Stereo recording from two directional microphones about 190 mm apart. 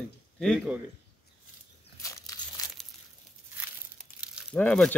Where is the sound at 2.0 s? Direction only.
15° left (ahead or behind).